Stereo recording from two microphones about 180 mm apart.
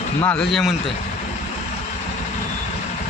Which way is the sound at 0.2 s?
10° left (ahead or behind).